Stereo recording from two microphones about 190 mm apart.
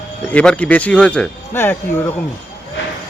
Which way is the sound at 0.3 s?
5° left (ahead or behind).